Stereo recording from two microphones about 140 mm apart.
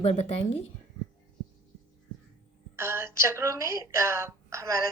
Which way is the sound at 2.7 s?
20° right (ahead or behind).